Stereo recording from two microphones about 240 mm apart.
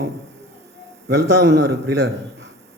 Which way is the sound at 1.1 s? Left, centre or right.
Right.